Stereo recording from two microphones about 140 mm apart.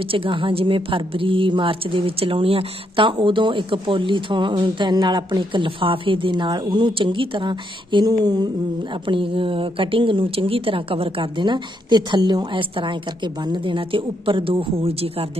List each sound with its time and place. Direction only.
0.1 s a woman's voice: 40° right (ahead or behind)